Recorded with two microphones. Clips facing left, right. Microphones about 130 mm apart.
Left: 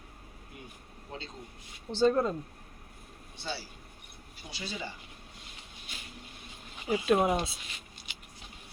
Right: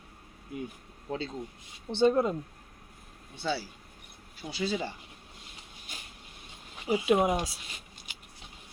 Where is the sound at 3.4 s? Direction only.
90° right.